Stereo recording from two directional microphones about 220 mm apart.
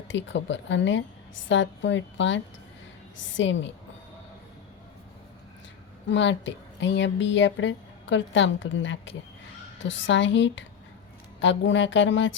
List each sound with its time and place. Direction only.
0.1 s a woman's voice: 55° left (ahead or behind)
6.1 s a woman's voice: 55° left (ahead or behind)